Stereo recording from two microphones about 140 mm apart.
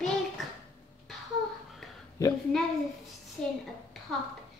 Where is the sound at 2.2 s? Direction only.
25° left (ahead or behind).